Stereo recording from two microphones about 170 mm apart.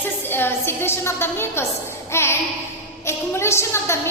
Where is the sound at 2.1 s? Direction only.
15° left (ahead or behind).